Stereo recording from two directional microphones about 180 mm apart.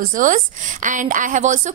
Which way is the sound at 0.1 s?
45° right (ahead or behind).